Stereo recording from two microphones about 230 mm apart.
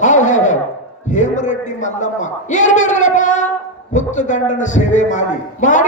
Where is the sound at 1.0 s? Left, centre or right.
Left.